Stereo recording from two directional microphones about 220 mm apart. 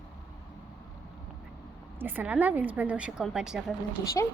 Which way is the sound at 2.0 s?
10° right (ahead or behind).